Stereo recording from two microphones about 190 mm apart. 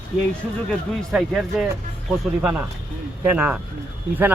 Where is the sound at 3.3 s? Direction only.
5° right (ahead or behind).